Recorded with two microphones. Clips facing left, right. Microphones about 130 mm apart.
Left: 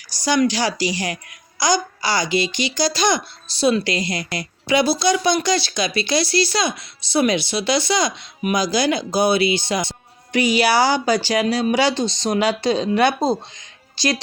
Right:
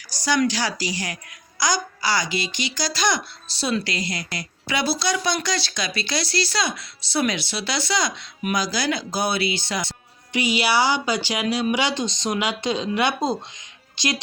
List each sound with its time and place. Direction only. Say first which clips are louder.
0.3 s a woman's voice: left 3 dB; 15° left (ahead or behind)
10.3 s a woman's voice: left 4 dB; 45° left (ahead or behind)